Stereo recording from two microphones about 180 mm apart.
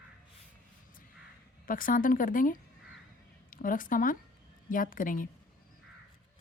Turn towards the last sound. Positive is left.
turn(degrees=50)  # may be behind; listen again after turning